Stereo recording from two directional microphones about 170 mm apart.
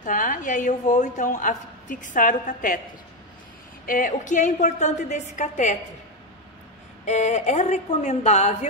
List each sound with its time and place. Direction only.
0.0 s a woman's voice: 50° left (ahead or behind)
3.8 s a woman's voice: 50° left (ahead or behind)
7.1 s a woman's voice: 40° left (ahead or behind)